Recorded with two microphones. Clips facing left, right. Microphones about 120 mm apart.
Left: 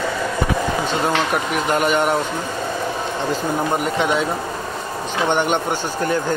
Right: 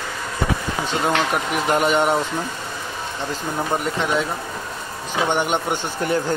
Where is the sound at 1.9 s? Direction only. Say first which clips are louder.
Even; 20° right (ahead or behind).